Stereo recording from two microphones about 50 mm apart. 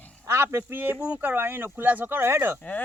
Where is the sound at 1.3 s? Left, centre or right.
Right.